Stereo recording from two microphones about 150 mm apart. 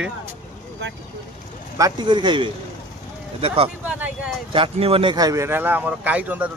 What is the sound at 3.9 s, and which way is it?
Speech, 10° right (ahead or behind).